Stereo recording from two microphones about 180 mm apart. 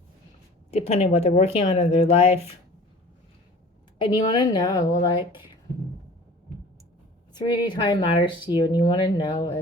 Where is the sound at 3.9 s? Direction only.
25° left (ahead or behind).